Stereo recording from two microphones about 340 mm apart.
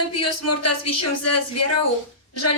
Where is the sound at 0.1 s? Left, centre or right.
Left.